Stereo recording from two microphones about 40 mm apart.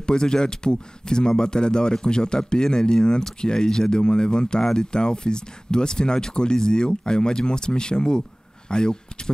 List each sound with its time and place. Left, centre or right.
0.0 s speech: centre